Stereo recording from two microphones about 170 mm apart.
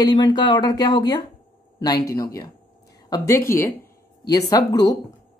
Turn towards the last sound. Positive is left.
turn(degrees=20)  # may be behind; listen again after turning